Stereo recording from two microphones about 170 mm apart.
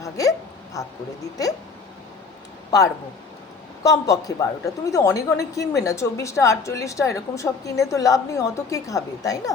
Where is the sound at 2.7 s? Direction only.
20° left (ahead or behind).